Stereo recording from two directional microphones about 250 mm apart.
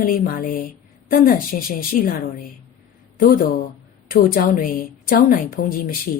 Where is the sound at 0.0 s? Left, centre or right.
Left.